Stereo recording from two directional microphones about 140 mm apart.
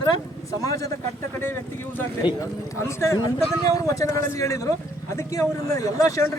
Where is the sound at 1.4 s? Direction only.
15° left (ahead or behind).